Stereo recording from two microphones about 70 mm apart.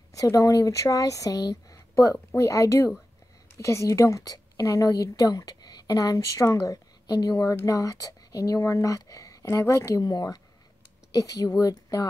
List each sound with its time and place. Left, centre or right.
0.1 s speech: left
2.3 s a woman's voice: left
10.0 s speech: left